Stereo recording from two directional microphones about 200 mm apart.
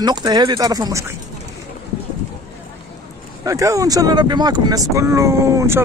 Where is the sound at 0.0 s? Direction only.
20° right (ahead or behind).